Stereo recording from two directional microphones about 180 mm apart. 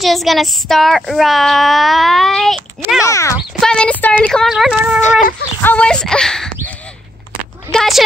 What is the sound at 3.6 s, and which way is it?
A woman's voice, 5° left (ahead or behind).